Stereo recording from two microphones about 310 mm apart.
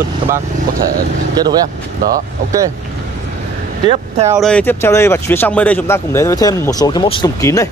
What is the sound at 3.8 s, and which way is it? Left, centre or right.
Speech, centre.